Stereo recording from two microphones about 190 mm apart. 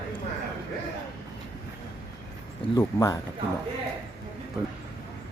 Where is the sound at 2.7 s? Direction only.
20° left (ahead or behind).